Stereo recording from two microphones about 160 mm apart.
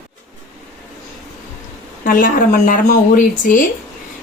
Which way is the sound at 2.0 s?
60° left (ahead or behind).